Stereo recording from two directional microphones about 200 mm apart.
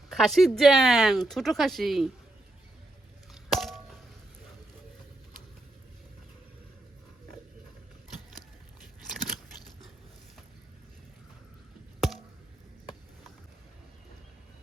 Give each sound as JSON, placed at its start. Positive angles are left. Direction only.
{"t": 0.1, "sound": "speech", "side_deg": 0}
{"t": 3.3, "sound": "crack", "side_deg": 0}
{"t": 11.9, "sound": "a sound", "side_deg": 0}